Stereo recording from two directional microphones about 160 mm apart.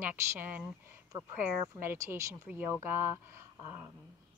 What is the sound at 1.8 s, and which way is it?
Speech, 15° right (ahead or behind).